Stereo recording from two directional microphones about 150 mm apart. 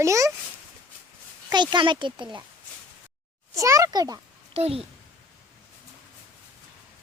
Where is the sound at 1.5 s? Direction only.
30° right (ahead or behind).